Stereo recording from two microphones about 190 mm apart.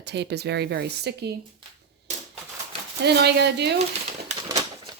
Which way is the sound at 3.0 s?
60° right (ahead or behind).